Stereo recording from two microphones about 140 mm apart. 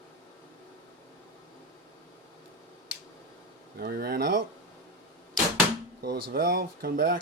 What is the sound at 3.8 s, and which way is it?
Speech, 90° right.